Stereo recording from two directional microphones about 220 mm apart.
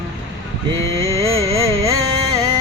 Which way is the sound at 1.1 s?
15° right (ahead or behind).